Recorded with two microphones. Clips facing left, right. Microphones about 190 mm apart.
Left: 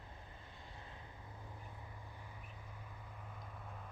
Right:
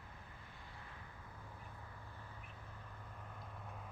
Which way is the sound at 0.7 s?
25° left (ahead or behind).